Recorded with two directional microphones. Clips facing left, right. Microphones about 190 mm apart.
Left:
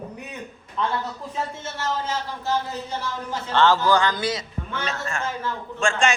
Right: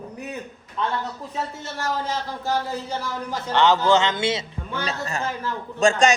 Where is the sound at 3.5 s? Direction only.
20° right (ahead or behind); by 6.1 s 40° right (ahead or behind).